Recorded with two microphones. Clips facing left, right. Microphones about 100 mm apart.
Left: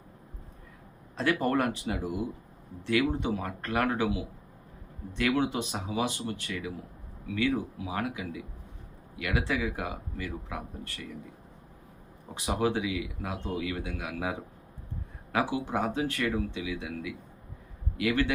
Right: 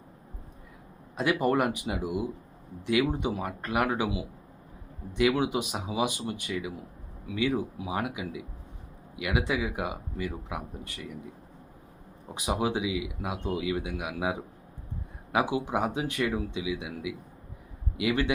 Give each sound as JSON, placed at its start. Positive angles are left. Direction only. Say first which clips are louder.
{"t": 1.1, "sound": "speech", "louder": "right 1 dB", "side_deg": -15}
{"t": 12.3, "sound": "a man's voice", "louder": "even", "side_deg": -15}